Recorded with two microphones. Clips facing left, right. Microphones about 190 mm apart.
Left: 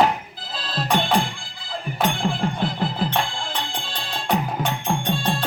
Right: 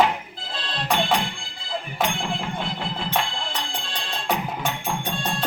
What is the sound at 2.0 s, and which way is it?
Music, 40° left (ahead or behind).